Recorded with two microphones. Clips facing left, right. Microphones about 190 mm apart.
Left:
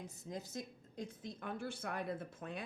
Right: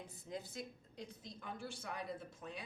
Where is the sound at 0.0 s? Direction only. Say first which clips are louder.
Left 1 dB; 45° left (ahead or behind).